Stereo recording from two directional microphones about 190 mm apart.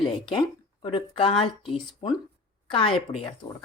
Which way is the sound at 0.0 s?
25° left (ahead or behind).